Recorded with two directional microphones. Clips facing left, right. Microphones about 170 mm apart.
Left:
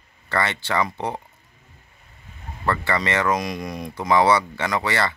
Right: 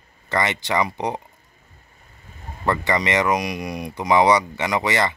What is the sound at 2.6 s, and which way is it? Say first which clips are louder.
Speech: right 2 dB; 15° right (ahead or behind).